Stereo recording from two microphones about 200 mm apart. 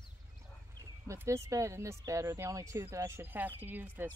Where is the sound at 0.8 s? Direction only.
15° right (ahead or behind).